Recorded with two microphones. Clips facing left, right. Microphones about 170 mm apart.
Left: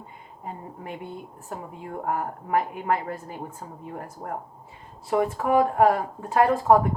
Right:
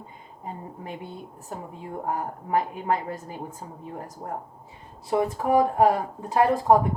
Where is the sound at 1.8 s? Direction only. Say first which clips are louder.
Left 1 dB; 35° right (ahead or behind).